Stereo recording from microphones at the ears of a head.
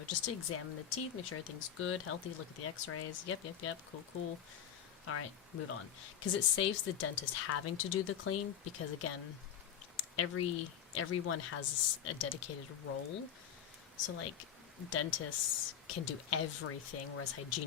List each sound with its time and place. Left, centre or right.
0.0 s speech: left